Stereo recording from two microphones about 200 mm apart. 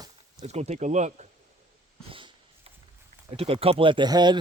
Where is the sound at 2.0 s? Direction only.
25° right (ahead or behind).